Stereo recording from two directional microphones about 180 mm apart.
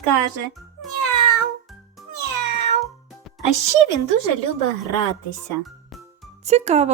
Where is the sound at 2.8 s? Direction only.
Centre (ahead or behind).